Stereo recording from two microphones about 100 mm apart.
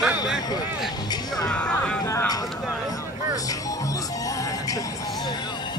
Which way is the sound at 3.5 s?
35° left (ahead or behind).